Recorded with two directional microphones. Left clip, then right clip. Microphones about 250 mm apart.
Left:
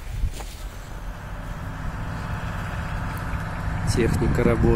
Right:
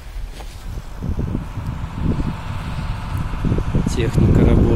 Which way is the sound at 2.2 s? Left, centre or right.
Left.